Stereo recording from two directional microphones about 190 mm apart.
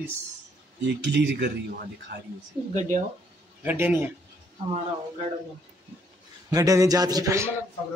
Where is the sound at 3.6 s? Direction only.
10° right (ahead or behind).